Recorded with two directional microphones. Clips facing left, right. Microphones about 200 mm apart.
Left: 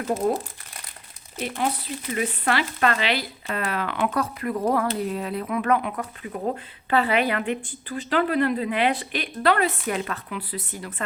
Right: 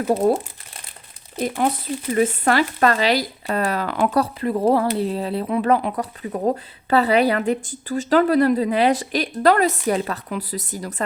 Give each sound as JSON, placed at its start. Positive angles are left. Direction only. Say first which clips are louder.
{"t": 1.4, "sound": "a woman's voice", "louder": "right 5 dB", "side_deg": -40}